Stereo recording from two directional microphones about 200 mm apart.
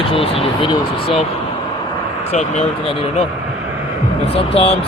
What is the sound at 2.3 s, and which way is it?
Speech, 35° left (ahead or behind).